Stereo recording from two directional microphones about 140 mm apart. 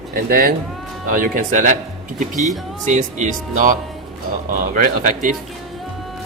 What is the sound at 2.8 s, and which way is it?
Speech, 60° right (ahead or behind).